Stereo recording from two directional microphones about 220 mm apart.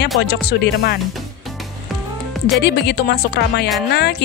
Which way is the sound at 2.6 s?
50° left (ahead or behind).